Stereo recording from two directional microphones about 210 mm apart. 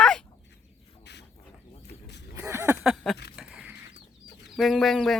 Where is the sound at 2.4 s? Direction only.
15° right (ahead or behind).